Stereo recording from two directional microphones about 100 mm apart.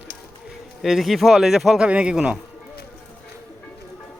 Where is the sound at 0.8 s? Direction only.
Centre (ahead or behind).